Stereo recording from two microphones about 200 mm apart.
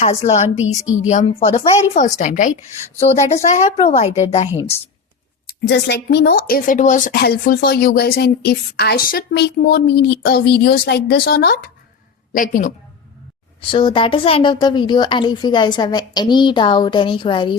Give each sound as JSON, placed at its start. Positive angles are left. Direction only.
{"t": 0.0, "sound": "a woman's voice", "side_deg": 35}
{"t": 5.5, "sound": "speech", "side_deg": 55}
{"t": 13.6, "sound": "a woman's voice", "side_deg": 25}